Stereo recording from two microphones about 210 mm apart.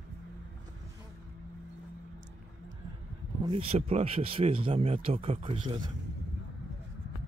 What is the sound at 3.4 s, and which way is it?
Speech, 25° right (ahead or behind).